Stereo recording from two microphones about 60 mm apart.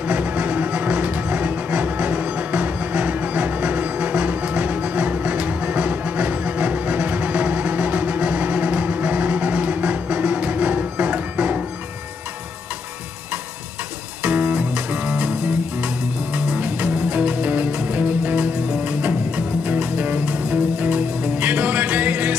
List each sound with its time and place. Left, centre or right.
0.0 s music: right
14.2 s music: right